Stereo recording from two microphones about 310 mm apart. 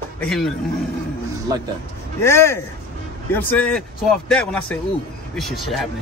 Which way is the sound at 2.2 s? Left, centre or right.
Centre.